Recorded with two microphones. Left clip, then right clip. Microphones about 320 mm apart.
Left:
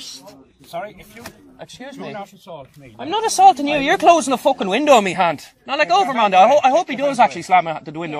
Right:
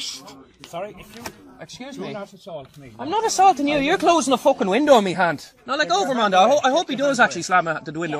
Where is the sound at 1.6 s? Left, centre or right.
Left.